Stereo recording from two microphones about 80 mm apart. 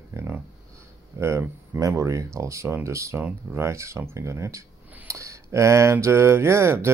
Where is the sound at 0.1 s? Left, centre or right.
Right.